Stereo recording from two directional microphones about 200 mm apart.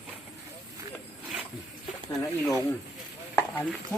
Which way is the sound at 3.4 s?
5° left (ahead or behind).